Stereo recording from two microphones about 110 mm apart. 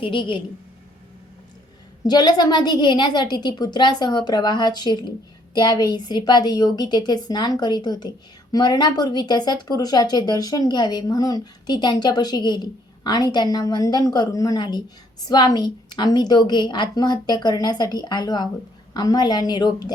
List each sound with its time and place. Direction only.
0.0 s a woman's voice: 50° left (ahead or behind)
2.0 s a woman's voice: 40° left (ahead or behind)